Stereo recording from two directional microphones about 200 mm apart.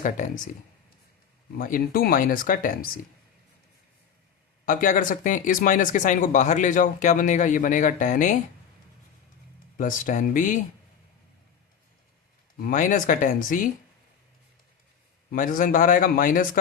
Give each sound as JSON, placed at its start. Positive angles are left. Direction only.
{"t": 0.0, "sound": "speech", "side_deg": 40}
{"t": 1.5, "sound": "speech", "side_deg": 45}
{"t": 4.6, "sound": "speech", "side_deg": 40}
{"t": 9.7, "sound": "speech", "side_deg": 40}
{"t": 12.5, "sound": "speech", "side_deg": 45}
{"t": 15.3, "sound": "speech", "side_deg": 40}